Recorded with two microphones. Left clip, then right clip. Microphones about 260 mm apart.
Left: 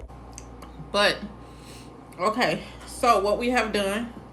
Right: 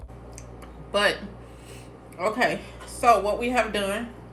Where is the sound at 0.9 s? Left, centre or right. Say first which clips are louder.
Left 1 dB; centre.